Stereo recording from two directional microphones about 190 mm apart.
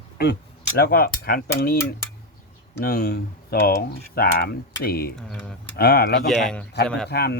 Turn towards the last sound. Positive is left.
turn(degrees=55)  # may be behind; listen again after turning